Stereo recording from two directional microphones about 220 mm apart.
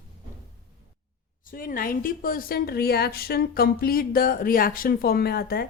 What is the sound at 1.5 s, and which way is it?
Speech, 40° left (ahead or behind).